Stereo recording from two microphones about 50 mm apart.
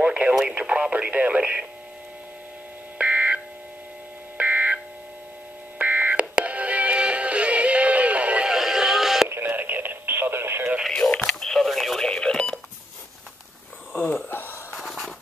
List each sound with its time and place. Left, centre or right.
0.0 s radio: right
0.6 s speech: right
3.0 s telephone dialing: right
4.4 s buzzer: right
5.8 s music: right
8.5 s music: centre
9.3 s radio: right
11.3 s radio: centre
12.0 s radio: centre
14.3 s a sound: left
14.7 s a sound: centre